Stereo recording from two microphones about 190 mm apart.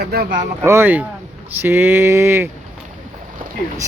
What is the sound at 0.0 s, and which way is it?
Speech, 55° right (ahead or behind).